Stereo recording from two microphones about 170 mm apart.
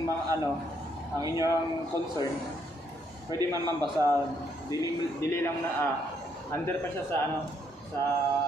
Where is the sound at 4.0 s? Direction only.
20° right (ahead or behind).